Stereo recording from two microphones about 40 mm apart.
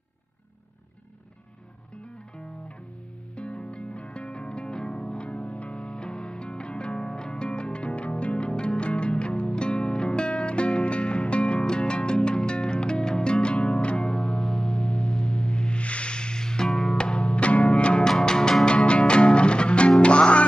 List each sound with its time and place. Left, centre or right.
3.3 s music: left
14.7 s music: left
18.0 s music: centre